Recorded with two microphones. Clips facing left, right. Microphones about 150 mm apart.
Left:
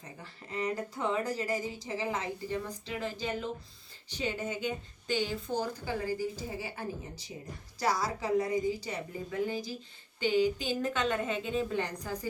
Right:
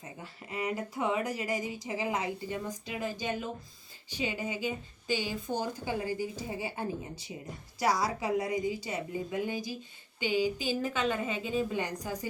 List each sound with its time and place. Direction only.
0.2 s speech: 10° right (ahead or behind)